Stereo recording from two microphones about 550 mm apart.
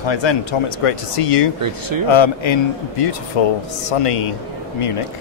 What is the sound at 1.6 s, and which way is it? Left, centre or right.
Speech, right.